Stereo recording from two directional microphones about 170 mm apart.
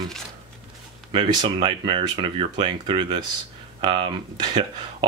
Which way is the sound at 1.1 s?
25° right (ahead or behind).